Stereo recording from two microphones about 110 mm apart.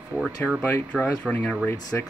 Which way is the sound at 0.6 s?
15° left (ahead or behind).